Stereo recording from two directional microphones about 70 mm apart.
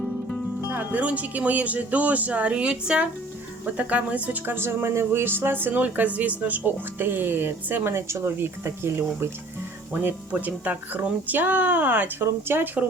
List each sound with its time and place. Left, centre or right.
0.7 s speech: right
9.9 s speech: right